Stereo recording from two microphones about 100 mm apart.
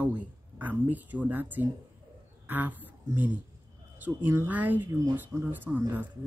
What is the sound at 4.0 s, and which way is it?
Speech, 20° right (ahead or behind).